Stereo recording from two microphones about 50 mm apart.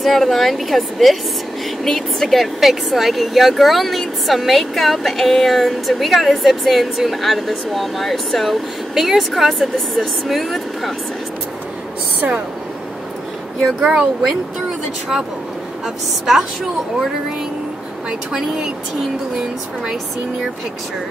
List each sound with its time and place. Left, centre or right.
0.0 s speech: centre
13.7 s speech: centre